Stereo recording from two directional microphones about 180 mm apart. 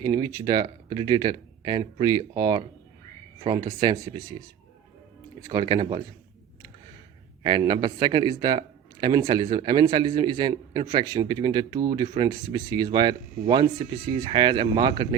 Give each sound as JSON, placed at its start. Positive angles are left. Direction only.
{"t": 0.0, "sound": "speech", "side_deg": -20}
{"t": 3.7, "sound": "speech", "side_deg": -20}
{"t": 5.5, "sound": "speech", "side_deg": -25}
{"t": 7.4, "sound": "speech", "side_deg": -25}
{"t": 14.3, "sound": "speech", "side_deg": -25}